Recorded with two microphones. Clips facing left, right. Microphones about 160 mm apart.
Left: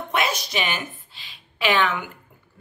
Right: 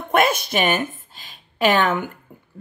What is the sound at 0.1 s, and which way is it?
A woman's voice, 50° right (ahead or behind).